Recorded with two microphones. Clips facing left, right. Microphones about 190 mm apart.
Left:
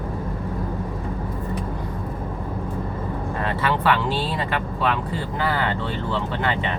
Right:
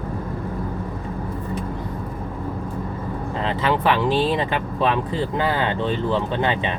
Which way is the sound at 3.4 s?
20° right (ahead or behind).